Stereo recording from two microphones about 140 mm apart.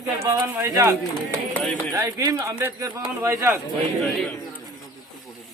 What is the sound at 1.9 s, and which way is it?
Speech, 20° right (ahead or behind).